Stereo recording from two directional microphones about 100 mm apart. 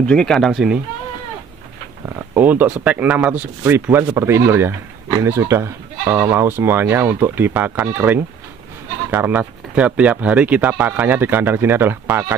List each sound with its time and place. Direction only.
0.0 s speech: 10° left (ahead or behind)
2.0 s speech: 25° right (ahead or behind)